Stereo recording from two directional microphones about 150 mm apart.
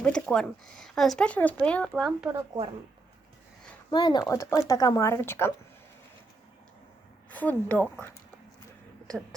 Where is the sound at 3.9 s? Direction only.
30° left (ahead or behind).